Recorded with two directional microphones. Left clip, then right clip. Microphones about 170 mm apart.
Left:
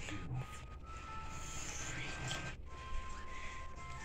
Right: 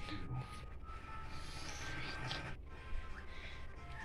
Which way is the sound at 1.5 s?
20° left (ahead or behind).